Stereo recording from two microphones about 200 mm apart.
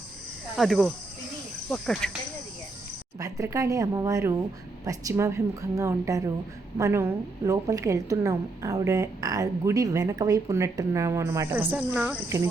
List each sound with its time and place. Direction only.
0.5 s speech: centre (ahead or behind)
3.2 s a woman's voice: 15° right (ahead or behind)